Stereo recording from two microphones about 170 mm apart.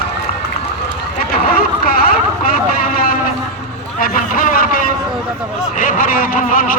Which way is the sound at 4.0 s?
60° left (ahead or behind).